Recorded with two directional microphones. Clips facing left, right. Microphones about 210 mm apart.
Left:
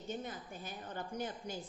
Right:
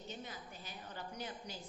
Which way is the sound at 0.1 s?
50° left (ahead or behind).